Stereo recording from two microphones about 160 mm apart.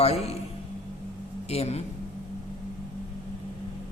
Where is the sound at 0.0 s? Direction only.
40° left (ahead or behind).